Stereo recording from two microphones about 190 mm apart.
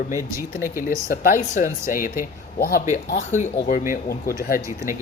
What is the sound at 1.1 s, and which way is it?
Speech, 45° left (ahead or behind).